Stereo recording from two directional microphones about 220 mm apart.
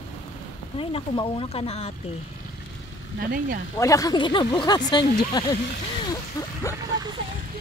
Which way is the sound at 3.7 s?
15° left (ahead or behind).